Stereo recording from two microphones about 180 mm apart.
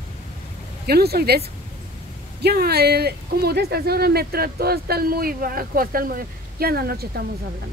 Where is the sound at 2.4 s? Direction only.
60° right (ahead or behind).